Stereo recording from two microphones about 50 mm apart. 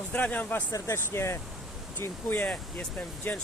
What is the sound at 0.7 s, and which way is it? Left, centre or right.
Speech, left.